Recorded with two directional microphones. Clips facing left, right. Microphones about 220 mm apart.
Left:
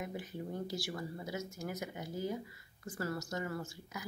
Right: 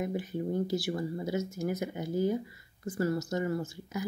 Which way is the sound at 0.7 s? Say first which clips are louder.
Right 9 dB; 25° right (ahead or behind).